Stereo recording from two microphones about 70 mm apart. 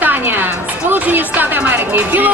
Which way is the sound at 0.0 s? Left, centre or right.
Right.